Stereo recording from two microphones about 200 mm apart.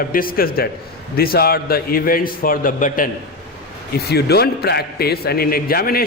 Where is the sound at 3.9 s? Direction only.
55° left (ahead or behind).